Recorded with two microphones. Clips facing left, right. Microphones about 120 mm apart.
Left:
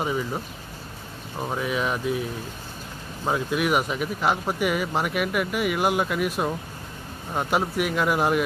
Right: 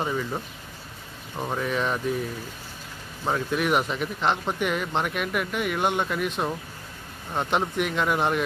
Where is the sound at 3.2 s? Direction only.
5° left (ahead or behind).